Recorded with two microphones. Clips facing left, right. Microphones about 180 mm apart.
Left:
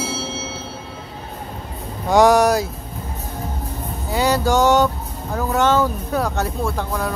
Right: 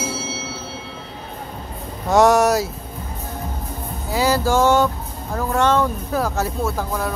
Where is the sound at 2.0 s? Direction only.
Centre (ahead or behind).